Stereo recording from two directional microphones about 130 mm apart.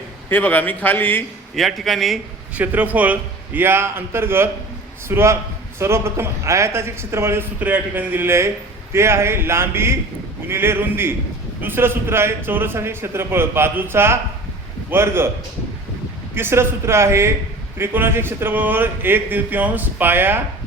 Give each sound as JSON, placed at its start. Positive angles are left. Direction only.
{"t": 0.3, "sound": "a man's voice", "side_deg": 15}
{"t": 1.5, "sound": "a man's voice", "side_deg": 0}
{"t": 2.6, "sound": "a man's voice", "side_deg": -10}
{"t": 16.3, "sound": "a man's voice", "side_deg": -20}